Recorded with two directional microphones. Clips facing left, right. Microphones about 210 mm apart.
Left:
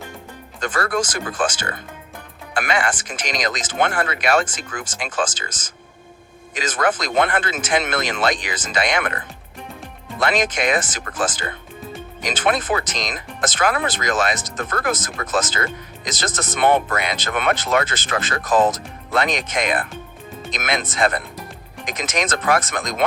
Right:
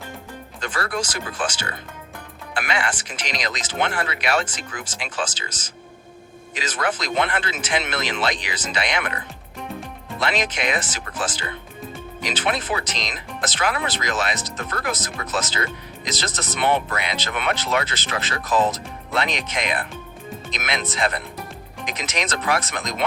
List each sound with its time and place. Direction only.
0.6 s speech: 50° left (ahead or behind)
10.2 s speech: 50° left (ahead or behind)